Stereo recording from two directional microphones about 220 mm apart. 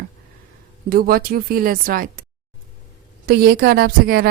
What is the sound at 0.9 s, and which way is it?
Speech, 40° right (ahead or behind).